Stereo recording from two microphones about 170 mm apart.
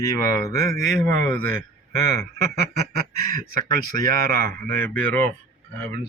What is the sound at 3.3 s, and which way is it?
Speech, 50° right (ahead or behind).